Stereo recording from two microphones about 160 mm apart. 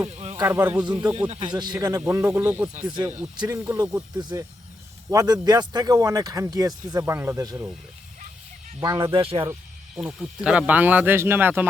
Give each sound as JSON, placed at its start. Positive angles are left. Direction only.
{"t": 0.3, "sound": "speech", "side_deg": -15}
{"t": 1.3, "sound": "speech", "side_deg": -30}
{"t": 2.0, "sound": "speech", "side_deg": -10}
{"t": 2.9, "sound": "speech", "side_deg": -30}
{"t": 3.4, "sound": "speech", "side_deg": -15}
{"t": 8.8, "sound": "speech", "side_deg": -25}
{"t": 9.9, "sound": "speech", "side_deg": -5}